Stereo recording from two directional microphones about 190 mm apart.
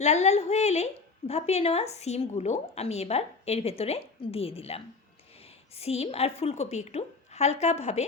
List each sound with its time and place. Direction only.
0.0 s a woman's voice: 35° left (ahead or behind)